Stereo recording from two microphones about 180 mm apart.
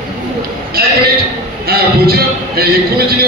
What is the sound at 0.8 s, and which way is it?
A man's voice, 60° right (ahead or behind).